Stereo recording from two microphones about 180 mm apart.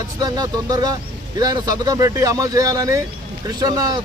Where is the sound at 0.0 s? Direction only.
20° right (ahead or behind).